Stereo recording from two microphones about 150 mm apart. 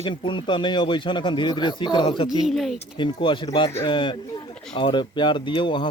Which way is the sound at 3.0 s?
30° left (ahead or behind).